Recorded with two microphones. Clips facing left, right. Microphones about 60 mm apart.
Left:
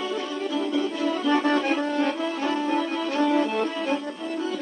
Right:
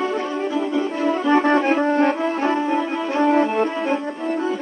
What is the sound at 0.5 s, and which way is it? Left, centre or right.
Brass instrument, right.